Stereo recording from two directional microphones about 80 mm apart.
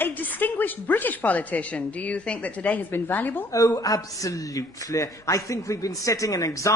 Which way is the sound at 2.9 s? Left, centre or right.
Left.